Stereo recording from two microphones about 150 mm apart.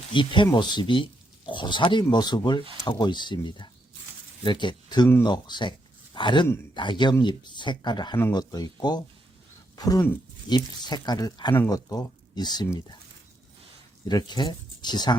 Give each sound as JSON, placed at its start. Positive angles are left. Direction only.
{"t": 0.1, "sound": "speech", "side_deg": 35}
{"t": 14.1, "sound": "speech", "side_deg": 30}